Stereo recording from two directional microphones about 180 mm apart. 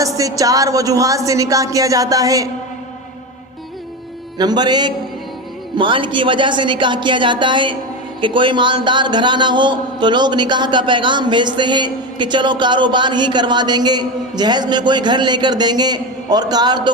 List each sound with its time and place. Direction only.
0.0 s speech: 20° right (ahead or behind)
4.4 s speech: 25° right (ahead or behind)